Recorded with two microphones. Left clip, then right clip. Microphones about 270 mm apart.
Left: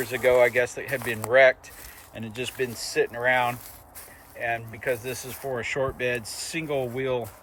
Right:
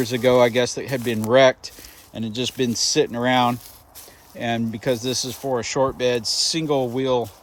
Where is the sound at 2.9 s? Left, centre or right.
Right.